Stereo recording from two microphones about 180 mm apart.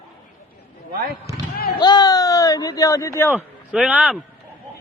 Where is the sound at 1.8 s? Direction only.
20° left (ahead or behind).